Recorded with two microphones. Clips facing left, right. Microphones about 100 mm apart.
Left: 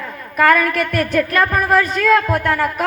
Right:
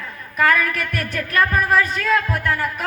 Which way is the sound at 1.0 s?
20° left (ahead or behind).